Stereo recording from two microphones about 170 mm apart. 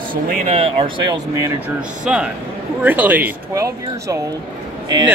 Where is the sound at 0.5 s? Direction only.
35° right (ahead or behind).